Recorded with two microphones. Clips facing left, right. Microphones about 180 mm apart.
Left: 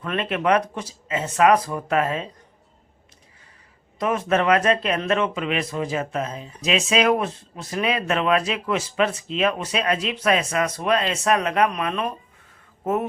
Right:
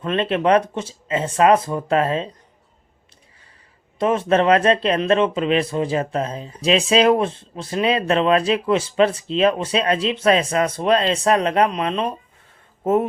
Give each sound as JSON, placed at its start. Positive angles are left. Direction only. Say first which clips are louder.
{"t": 0.0, "sound": "speech", "louder": "right 4 dB", "side_deg": -30}
{"t": 3.9, "sound": "speech", "louder": "right 4 dB", "side_deg": -30}